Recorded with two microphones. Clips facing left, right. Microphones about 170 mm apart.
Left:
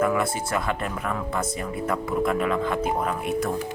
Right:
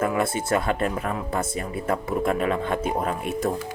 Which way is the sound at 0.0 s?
25° right (ahead or behind).